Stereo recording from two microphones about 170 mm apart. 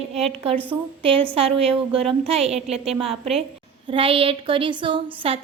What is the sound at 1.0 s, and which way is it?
A woman's voice, 30° right (ahead or behind).